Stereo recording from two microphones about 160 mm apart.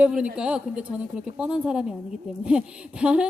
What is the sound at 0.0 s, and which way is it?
A woman's voice, 5° right (ahead or behind).